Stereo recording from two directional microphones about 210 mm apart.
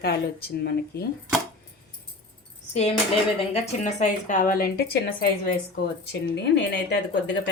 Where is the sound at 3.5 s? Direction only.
35° left (ahead or behind).